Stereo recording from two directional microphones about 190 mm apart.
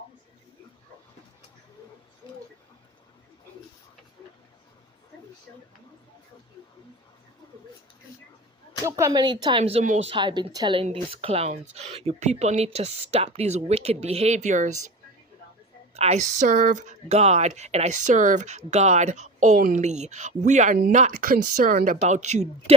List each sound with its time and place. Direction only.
8.8 s a woman's voice: 15° right (ahead or behind); by 14.9 s 40° right (ahead or behind)
16.0 s speech: 35° right (ahead or behind)
19.5 s speech: 50° right (ahead or behind)
19.8 s speech: 35° right (ahead or behind)